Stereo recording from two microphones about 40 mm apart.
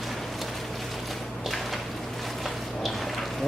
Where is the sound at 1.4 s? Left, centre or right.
Centre.